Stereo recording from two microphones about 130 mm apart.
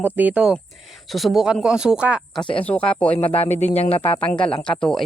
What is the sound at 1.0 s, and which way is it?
Speech, centre (ahead or behind).